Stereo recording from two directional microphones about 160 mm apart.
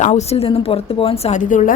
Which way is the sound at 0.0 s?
45° left (ahead or behind).